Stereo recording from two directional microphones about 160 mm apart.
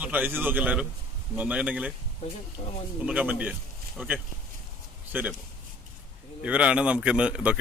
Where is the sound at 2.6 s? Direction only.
40° left (ahead or behind).